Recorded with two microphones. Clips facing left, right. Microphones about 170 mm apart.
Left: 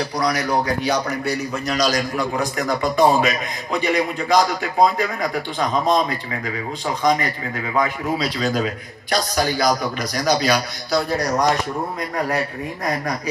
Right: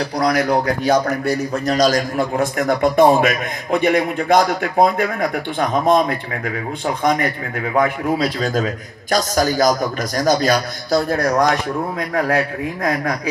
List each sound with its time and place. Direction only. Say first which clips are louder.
0.2 s a man's voice: right 5 dB; 55° right (ahead or behind)